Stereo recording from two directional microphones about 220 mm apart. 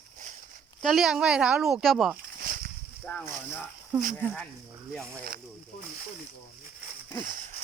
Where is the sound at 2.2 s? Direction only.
40° right (ahead or behind).